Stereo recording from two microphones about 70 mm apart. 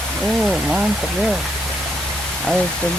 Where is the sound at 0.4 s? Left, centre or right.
Centre.